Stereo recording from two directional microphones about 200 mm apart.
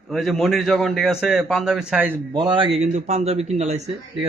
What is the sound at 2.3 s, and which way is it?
Speech, 25° right (ahead or behind).